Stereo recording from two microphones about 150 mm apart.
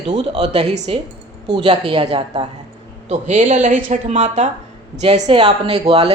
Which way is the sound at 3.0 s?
50° right (ahead or behind).